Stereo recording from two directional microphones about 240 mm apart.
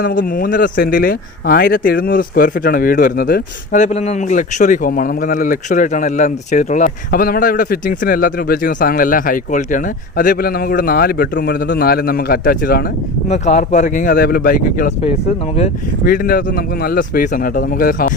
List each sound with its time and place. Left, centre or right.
0.0 s speech: left
13.2 s speech: left
16.0 s speech: left